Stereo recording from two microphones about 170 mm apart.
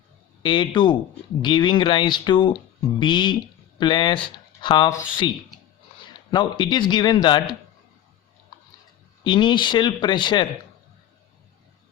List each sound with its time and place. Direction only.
0.4 s speech: 25° left (ahead or behind)
9.2 s speech: 25° left (ahead or behind)